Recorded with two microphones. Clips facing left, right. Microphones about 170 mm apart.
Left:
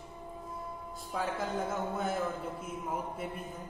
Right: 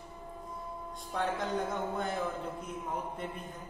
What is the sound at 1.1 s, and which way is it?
A man's voice, 5° left (ahead or behind).